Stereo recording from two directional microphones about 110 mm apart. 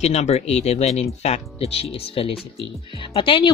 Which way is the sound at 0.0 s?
80° left.